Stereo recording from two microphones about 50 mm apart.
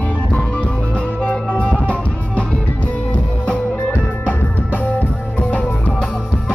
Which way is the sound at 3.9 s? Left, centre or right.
Left.